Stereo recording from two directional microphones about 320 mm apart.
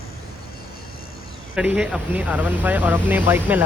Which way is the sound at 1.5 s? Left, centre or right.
Centre.